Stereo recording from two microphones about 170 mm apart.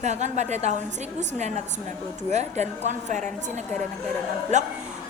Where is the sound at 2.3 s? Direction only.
40° right (ahead or behind).